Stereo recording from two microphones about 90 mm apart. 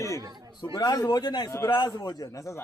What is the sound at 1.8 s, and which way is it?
Speech, 50° left (ahead or behind).